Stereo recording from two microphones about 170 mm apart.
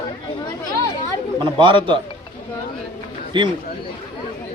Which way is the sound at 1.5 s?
30° right (ahead or behind).